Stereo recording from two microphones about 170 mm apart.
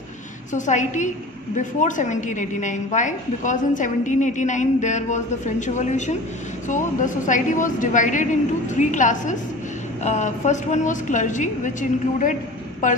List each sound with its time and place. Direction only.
0.5 s a woman's voice: 45° left (ahead or behind)